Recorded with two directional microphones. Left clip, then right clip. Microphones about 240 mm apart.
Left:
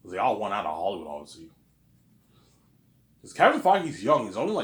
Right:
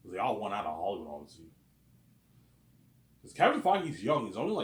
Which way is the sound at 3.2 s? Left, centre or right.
Left.